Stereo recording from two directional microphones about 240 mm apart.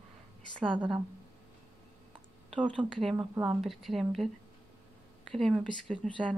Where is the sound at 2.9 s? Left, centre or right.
Centre.